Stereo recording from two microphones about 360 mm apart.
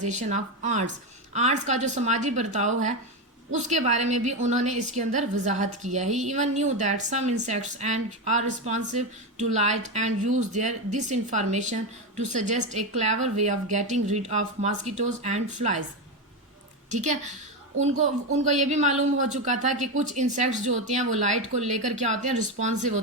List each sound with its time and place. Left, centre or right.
0.0 s speech: centre
16.9 s speech: centre